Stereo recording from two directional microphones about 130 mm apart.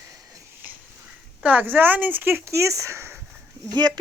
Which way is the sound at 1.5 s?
15° right (ahead or behind).